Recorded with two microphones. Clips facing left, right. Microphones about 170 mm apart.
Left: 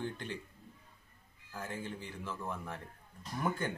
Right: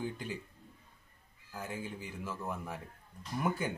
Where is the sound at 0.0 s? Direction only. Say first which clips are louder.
Right 1 dB; 5° right (ahead or behind).